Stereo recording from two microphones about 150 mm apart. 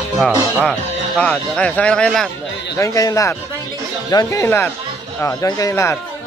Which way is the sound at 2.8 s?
20° left (ahead or behind).